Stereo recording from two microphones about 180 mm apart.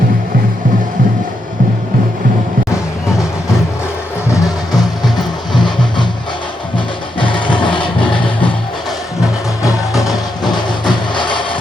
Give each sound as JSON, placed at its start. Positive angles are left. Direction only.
{"t": 5.1, "sound": "music", "side_deg": 25}
{"t": 10.0, "sound": "music", "side_deg": 20}